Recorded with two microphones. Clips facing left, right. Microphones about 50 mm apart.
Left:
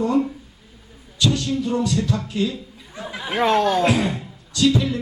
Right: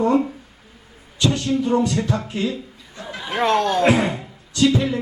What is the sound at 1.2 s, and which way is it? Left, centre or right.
Speech, right.